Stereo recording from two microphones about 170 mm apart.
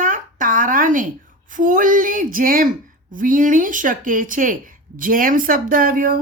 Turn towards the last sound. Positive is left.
turn(degrees=-55)  # may be behind; listen again after turning